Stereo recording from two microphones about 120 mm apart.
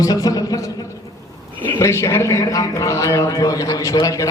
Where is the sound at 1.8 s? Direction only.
25° left (ahead or behind).